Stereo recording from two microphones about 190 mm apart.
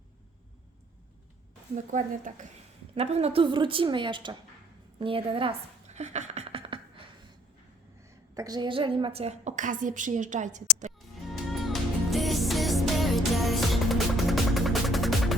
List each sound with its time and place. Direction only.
1.9 s a woman's voice: 40° right (ahead or behind); by 4.4 s 25° right (ahead or behind)
4.9 s a sound: 30° right (ahead or behind)
8.4 s a woman's voice: 20° right (ahead or behind); by 10.9 s 40° right (ahead or behind)
11.5 s music: centre (ahead or behind)